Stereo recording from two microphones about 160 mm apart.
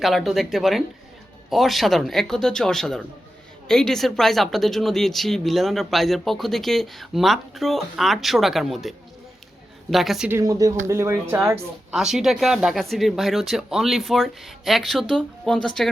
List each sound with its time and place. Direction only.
0.0 s speech: centre (ahead or behind)
10.2 s speech: 20° right (ahead or behind)
11.9 s speech: centre (ahead or behind)